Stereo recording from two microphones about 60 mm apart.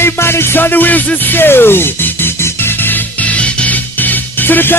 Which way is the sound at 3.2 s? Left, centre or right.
Left.